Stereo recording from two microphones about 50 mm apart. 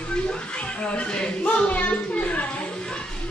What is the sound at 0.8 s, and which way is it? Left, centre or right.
A man's voice, left.